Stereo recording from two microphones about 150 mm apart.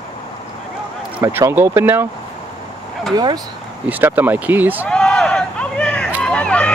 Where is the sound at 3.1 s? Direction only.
25° right (ahead or behind).